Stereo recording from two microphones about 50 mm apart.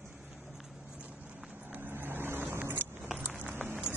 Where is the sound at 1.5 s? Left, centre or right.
Right.